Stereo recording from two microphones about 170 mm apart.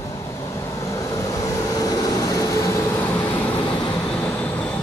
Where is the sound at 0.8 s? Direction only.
20° left (ahead or behind).